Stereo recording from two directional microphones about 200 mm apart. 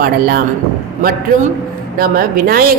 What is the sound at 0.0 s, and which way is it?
Speech, 50° right (ahead or behind).